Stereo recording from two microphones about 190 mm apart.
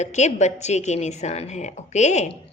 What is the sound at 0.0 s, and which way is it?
A woman's voice, 35° left (ahead or behind).